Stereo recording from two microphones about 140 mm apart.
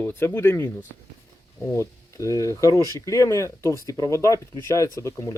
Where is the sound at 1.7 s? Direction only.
20° left (ahead or behind).